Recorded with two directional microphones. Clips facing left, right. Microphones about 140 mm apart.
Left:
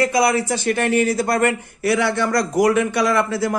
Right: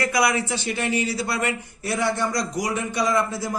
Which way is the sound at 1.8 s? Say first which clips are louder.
Left 5 dB; 75° left (ahead or behind).